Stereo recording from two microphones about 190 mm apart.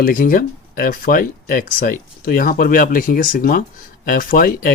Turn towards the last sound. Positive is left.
turn(degrees=50)  # may be behind; listen again after turning